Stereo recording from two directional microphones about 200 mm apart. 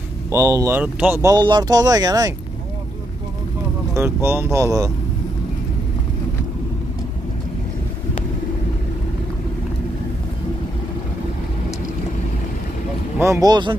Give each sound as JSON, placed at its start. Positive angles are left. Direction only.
{"t": 0.3, "sound": "speech", "side_deg": -15}
{"t": 1.2, "sound": "speech", "side_deg": -20}
{"t": 3.9, "sound": "speech", "side_deg": -10}
{"t": 13.2, "sound": "speech", "side_deg": -15}